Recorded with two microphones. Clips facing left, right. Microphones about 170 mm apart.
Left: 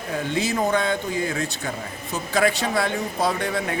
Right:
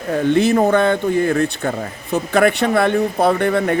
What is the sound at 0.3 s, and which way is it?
A man's voice, 60° right (ahead or behind).